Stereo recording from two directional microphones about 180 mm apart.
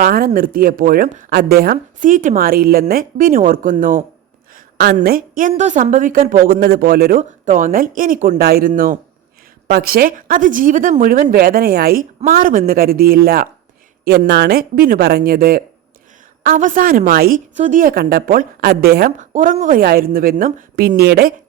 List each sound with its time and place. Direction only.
0.0 s a woman's voice: 55° right (ahead or behind)
7.2 s a woman's voice: 45° right (ahead or behind)
19.3 s a woman's voice: 40° right (ahead or behind); by 21.3 s 60° right (ahead or behind)